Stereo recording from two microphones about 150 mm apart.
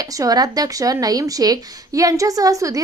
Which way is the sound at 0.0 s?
25° right (ahead or behind).